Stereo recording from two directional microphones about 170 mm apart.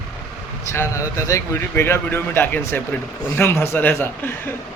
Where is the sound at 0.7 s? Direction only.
15° left (ahead or behind).